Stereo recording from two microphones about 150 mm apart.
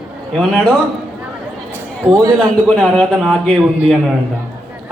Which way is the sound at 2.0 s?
20° right (ahead or behind).